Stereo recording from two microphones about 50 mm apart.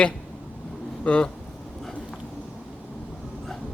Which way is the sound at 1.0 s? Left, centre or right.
Left.